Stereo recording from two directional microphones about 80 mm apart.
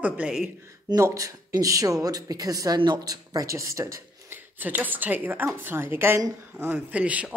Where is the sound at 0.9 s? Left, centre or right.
Right.